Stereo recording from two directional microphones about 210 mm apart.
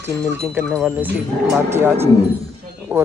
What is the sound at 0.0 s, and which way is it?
Speech, 10° right (ahead or behind).